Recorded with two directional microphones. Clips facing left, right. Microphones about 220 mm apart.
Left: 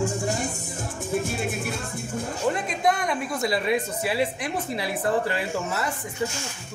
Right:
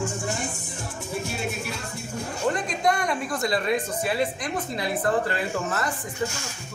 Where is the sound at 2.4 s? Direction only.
5° left (ahead or behind).